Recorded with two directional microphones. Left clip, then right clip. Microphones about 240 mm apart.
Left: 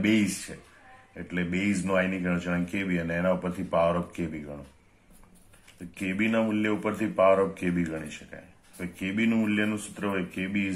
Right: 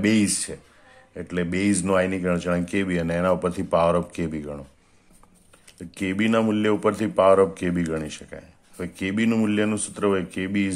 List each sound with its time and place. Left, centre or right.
1.1 s speech: right
5.9 s speech: right